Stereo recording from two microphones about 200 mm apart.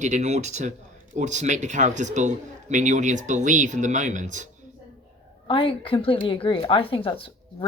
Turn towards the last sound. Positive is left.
turn(degrees=25)  # may be behind; listen again after turning